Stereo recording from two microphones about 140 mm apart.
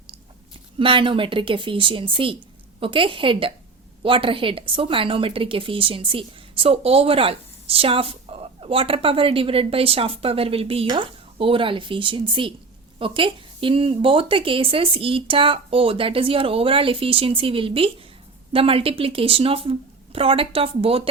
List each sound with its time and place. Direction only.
0.8 s a woman's voice: 40° right (ahead or behind)